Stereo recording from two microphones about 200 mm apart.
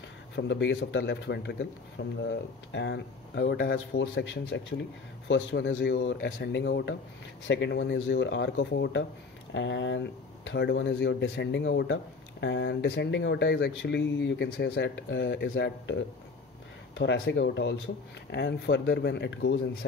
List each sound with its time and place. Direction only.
0.4 s speech: 60° left (ahead or behind)
3.7 s speech: 70° left (ahead or behind)